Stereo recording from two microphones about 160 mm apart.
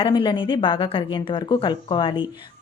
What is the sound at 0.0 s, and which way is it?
A woman's voice, 25° left (ahead or behind).